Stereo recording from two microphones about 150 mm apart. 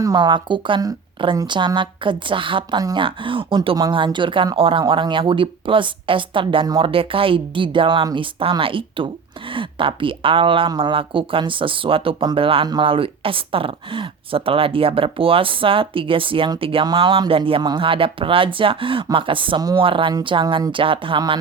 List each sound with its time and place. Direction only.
0.0 s speech: 25° right (ahead or behind)